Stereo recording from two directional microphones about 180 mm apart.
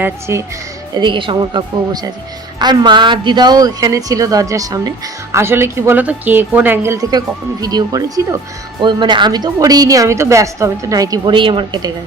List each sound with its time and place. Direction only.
0.0 s speech: 15° right (ahead or behind)
0.9 s a woman's voice: 25° right (ahead or behind)